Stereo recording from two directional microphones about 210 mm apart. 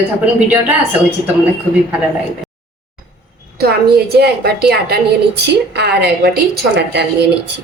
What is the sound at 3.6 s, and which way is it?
A woman's voice, 50° right (ahead or behind).